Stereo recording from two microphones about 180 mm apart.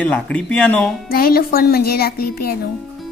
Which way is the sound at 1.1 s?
55° left (ahead or behind).